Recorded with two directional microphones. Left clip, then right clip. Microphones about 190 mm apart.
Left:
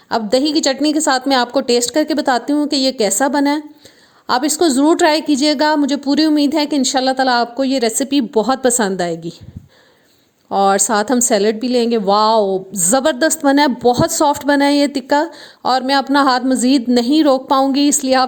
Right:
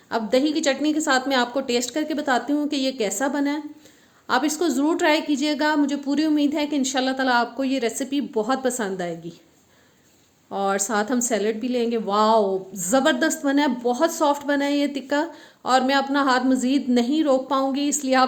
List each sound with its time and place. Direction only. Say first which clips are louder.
0.1 s a woman's voice: left 6 dB; 40° left (ahead or behind)
10.5 s a woman's voice: left 10 dB; 45° left (ahead or behind)